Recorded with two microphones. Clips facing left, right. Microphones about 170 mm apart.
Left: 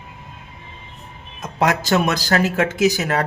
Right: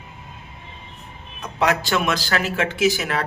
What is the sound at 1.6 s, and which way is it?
Speech, 40° left (ahead or behind).